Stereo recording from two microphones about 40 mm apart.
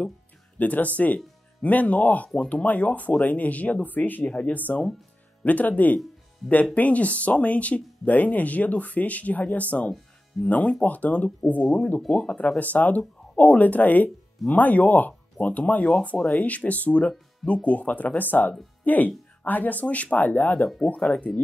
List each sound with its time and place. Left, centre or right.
0.6 s speech: left
4.3 s speech: left
5.4 s speech: left
20.8 s speech: left